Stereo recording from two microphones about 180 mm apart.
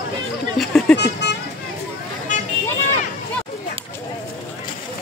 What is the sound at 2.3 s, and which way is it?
Vehicle, 45° left (ahead or behind).